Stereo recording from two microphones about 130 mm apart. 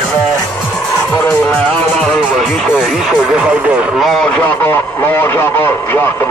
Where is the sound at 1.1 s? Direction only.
20° left (ahead or behind).